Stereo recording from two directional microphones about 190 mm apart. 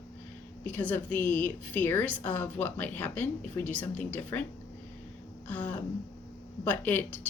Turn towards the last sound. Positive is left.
turn(degrees=10)  # may be behind; listen again after turning